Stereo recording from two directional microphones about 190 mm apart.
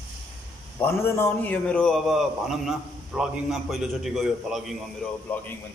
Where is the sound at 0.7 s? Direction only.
10° left (ahead or behind).